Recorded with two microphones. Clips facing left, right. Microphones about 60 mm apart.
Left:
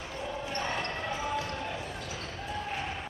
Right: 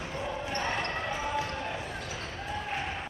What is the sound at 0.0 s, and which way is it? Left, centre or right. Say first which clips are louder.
Basketball bounce: right 2 dB; right.